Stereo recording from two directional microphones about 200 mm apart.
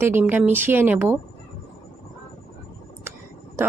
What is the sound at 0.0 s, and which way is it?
A woman's voice, 10° right (ahead or behind).